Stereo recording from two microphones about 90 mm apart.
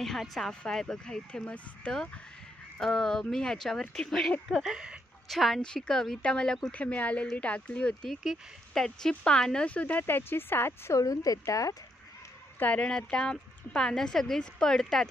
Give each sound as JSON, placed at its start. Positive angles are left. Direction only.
{"t": 0.0, "sound": "speech", "side_deg": 0}
{"t": 8.2, "sound": "speech", "side_deg": -5}
{"t": 8.8, "sound": "speech", "side_deg": 5}
{"t": 11.0, "sound": "speech", "side_deg": 40}
{"t": 12.5, "sound": "speech", "side_deg": 15}